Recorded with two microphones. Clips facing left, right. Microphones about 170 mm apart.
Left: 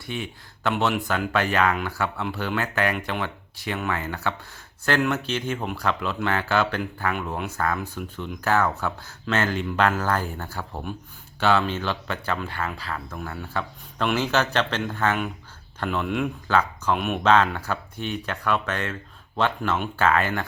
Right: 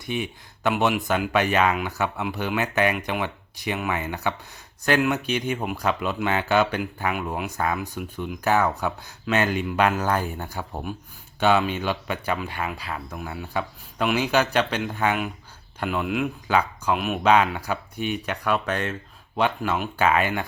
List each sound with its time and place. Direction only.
0.0 s speech: 15° right (ahead or behind)